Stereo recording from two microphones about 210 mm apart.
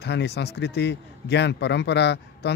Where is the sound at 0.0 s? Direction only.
55° left (ahead or behind).